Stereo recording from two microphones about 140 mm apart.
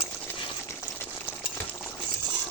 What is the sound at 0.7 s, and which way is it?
Boiling, 15° left (ahead or behind).